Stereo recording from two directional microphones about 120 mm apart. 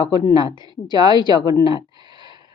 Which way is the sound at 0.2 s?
35° left (ahead or behind).